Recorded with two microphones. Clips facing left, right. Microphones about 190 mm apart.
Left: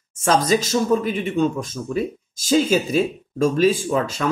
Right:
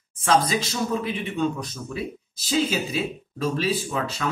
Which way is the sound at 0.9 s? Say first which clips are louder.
Left 6 dB; 45° left (ahead or behind).